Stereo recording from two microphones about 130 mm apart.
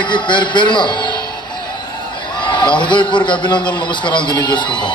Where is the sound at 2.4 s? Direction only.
35° left (ahead or behind).